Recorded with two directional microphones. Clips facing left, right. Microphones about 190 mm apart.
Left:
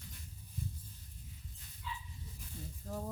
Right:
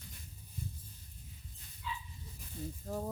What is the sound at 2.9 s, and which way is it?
Speech, 20° right (ahead or behind).